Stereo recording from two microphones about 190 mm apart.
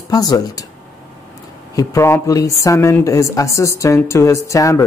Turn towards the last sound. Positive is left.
turn(degrees=15)  # may be behind; listen again after turning